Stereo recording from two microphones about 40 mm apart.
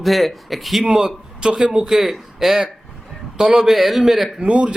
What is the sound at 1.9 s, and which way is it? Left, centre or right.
Speech, centre.